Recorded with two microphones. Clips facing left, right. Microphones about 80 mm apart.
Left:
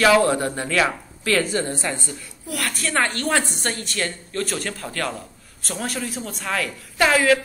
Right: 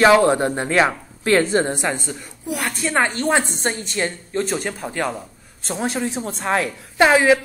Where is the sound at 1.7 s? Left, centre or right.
Right.